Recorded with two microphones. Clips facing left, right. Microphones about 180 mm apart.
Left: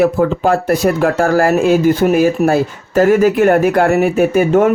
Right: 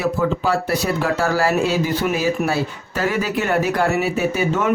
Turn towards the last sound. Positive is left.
turn(degrees=55)  # may be behind; listen again after turning